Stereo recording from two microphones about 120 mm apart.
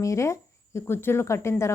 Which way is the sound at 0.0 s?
25° left (ahead or behind).